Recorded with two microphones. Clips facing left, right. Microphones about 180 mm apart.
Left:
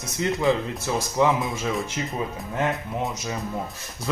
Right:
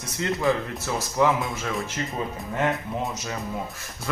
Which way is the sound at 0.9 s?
15° left (ahead or behind).